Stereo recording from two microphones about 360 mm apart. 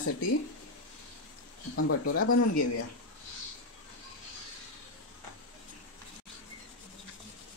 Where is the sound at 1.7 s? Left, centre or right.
Left.